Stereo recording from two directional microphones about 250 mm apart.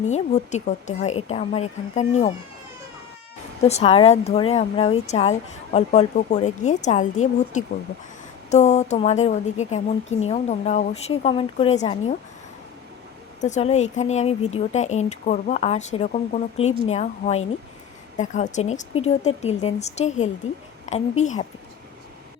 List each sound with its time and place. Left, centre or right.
0.0 s a woman's voice: left
3.6 s a woman's voice: left
13.4 s a woman's voice: left